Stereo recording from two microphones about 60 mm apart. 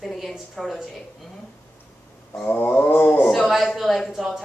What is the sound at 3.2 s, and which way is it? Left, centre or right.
A woman's voice, centre.